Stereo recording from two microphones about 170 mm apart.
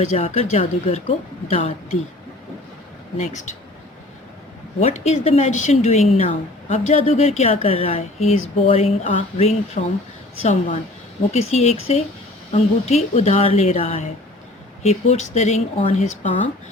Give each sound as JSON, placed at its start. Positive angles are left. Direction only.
{"t": 0.0, "sound": "speech", "side_deg": 40}
{"t": 3.2, "sound": "speech", "side_deg": 45}
{"t": 4.8, "sound": "speech", "side_deg": 40}
{"t": 9.8, "sound": "speech", "side_deg": 50}